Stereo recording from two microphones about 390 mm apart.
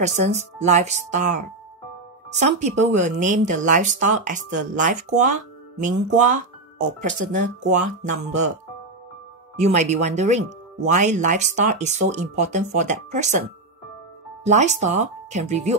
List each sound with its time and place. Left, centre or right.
0.0 s speech: centre
2.3 s a woman's voice: centre
9.6 s speech: centre